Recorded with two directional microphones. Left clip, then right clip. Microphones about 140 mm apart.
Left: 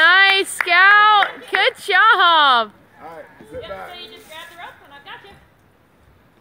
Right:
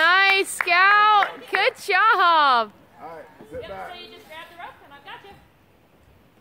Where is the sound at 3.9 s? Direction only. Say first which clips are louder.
Left 3 dB; 20° left (ahead or behind).